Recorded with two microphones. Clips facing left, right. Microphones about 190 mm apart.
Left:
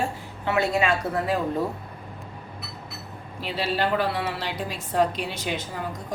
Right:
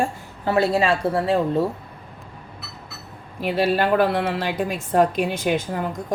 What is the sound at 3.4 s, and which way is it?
A woman's voice, 50° right (ahead or behind).